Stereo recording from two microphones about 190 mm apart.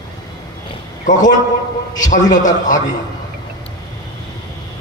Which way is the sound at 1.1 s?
40° left (ahead or behind).